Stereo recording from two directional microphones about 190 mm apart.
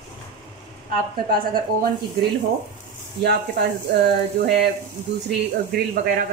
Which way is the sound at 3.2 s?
60° right (ahead or behind).